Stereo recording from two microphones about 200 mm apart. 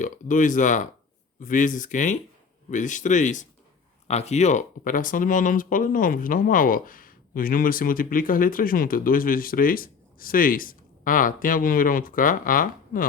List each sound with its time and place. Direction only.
0.0 s speech: 40° left (ahead or behind)